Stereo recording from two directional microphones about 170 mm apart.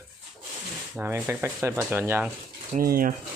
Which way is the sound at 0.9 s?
10° right (ahead or behind).